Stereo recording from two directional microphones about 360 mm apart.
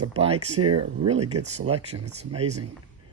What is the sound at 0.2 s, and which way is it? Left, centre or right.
Speech, centre.